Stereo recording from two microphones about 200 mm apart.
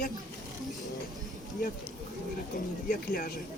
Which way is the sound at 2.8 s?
45° left (ahead or behind).